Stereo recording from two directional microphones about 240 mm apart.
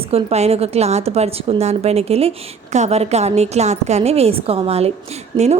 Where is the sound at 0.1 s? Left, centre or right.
Right.